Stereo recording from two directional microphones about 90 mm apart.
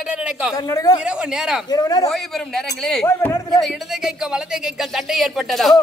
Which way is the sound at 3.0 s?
25° left (ahead or behind).